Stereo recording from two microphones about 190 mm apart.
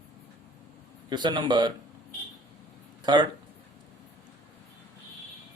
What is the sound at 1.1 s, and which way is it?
Speech, 25° right (ahead or behind).